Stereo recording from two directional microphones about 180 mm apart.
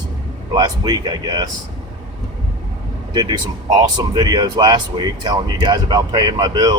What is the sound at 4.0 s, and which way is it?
Speech, 20° right (ahead or behind).